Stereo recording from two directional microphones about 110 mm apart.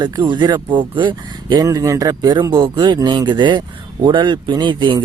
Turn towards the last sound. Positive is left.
turn(degrees=-45)  # may be behind; listen again after turning